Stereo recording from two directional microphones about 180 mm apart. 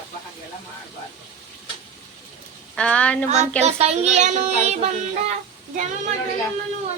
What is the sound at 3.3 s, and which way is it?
Child singing, 40° right (ahead or behind).